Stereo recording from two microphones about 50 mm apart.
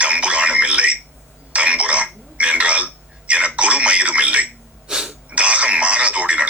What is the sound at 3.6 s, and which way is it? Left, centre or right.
Speech, right.